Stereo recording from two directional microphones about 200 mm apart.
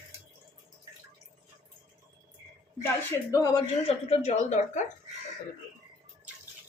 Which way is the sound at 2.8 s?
15° left (ahead or behind).